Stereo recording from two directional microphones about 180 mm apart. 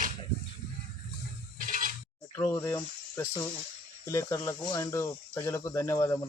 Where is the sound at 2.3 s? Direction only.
15° left (ahead or behind).